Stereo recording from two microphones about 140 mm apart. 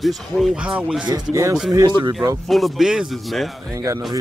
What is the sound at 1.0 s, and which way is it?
Speech, 25° right (ahead or behind).